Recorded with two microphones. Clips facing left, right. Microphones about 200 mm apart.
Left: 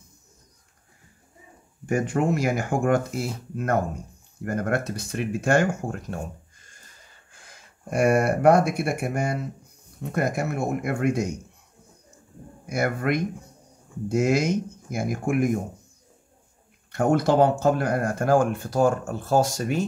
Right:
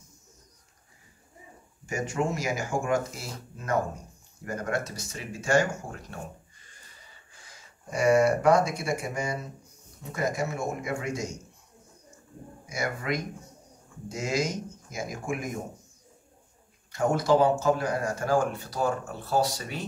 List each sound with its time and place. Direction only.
1.9 s speech: 60° left (ahead or behind)
12.6 s speech: 60° left (ahead or behind)
16.9 s speech: 60° left (ahead or behind)